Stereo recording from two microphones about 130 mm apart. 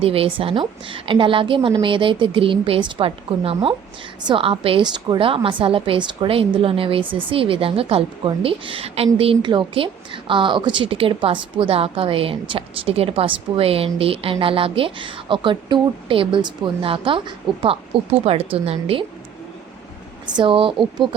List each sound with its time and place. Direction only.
0.0 s a woman's voice: 45° right (ahead or behind)
20.2 s a woman's voice: 35° right (ahead or behind)